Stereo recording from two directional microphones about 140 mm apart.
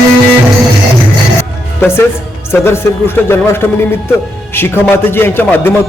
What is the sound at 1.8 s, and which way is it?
Speech, 15° left (ahead or behind).